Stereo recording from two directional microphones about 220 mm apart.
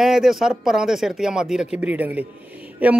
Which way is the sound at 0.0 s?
Centre (ahead or behind).